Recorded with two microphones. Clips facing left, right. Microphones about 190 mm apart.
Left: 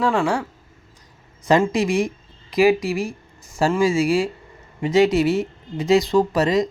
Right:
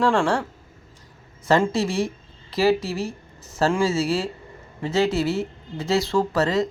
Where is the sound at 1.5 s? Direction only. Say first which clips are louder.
Left 2 dB; 15° left (ahead or behind).